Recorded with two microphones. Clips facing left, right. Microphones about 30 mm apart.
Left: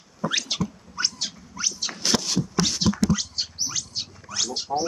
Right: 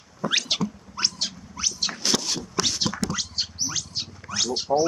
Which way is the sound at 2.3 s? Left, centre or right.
Centre.